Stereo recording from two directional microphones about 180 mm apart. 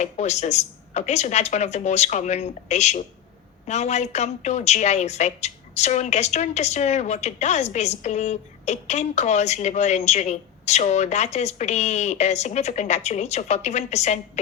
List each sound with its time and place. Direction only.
0.0 s a woman's voice: 40° left (ahead or behind)